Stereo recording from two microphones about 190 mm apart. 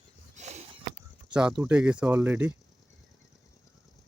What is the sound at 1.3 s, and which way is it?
Speech, 5° right (ahead or behind).